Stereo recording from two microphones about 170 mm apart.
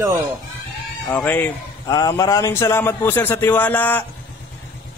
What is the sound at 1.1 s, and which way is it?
Speech, 10° left (ahead or behind).